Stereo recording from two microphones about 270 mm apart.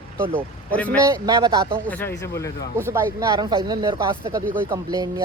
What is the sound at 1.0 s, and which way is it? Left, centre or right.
Speech, centre.